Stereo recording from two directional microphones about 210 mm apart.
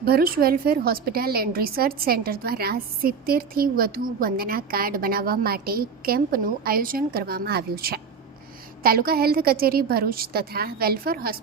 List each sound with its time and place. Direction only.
0.0 s a woman's voice: 45° right (ahead or behind)